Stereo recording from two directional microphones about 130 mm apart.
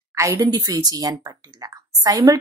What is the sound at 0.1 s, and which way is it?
Speech, 25° right (ahead or behind).